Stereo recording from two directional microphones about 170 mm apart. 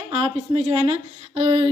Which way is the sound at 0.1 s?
35° right (ahead or behind).